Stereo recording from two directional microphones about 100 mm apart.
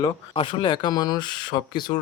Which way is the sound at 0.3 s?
55° left (ahead or behind).